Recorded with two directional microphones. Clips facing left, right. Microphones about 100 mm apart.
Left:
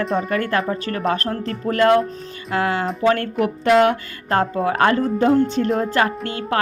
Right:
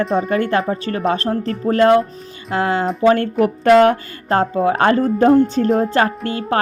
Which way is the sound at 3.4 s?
40° right (ahead or behind).